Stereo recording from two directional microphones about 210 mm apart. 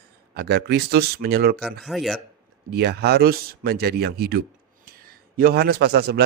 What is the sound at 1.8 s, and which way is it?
Speech, centre (ahead or behind).